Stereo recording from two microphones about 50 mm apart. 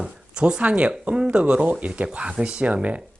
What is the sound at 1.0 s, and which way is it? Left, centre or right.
Speech, right.